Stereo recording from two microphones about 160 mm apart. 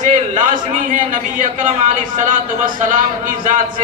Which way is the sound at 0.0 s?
55° right (ahead or behind).